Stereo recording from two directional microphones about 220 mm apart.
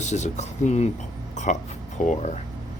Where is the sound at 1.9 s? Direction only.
30° left (ahead or behind).